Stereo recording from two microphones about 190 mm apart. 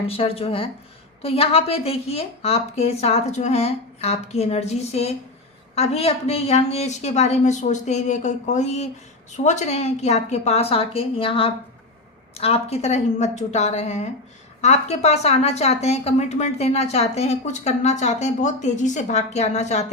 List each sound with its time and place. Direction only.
0.1 s a woman's voice: 30° left (ahead or behind)